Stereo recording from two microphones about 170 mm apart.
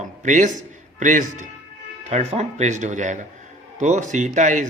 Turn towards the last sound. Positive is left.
turn(degrees=-45)  # may be behind; listen again after turning